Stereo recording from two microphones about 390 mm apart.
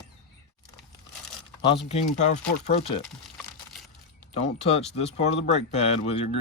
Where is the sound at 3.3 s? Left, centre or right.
Centre.